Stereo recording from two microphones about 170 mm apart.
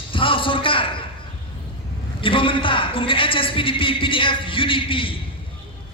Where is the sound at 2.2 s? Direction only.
30° left (ahead or behind).